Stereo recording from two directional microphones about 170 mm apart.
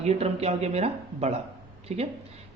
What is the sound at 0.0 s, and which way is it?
Speech, 40° right (ahead or behind).